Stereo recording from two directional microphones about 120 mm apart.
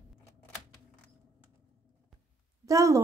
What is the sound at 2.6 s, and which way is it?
Speech, 25° right (ahead or behind).